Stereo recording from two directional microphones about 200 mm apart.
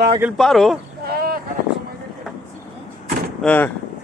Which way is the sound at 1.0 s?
50° right (ahead or behind).